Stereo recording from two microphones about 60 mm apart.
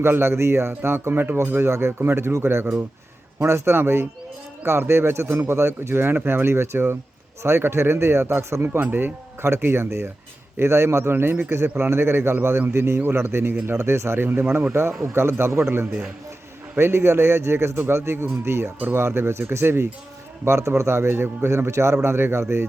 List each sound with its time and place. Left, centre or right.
0.0 s a man's voice: right
8.8 s a man's voice: right
14.7 s a man's voice: right
20.4 s a man's voice: right